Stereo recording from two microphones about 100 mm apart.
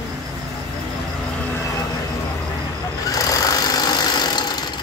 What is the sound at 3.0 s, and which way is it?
Vehicle, 35° left (ahead or behind).